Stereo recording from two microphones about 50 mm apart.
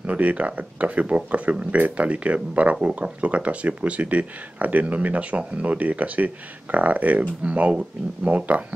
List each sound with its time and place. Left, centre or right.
0.0 s speech: right